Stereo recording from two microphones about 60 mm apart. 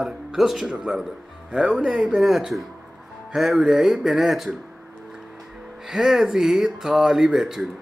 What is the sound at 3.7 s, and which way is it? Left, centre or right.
Speech, centre.